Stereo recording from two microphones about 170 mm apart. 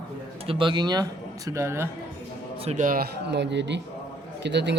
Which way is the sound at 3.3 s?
90° right.